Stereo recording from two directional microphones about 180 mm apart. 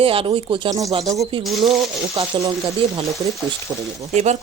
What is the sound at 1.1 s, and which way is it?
Speech, 30° right (ahead or behind).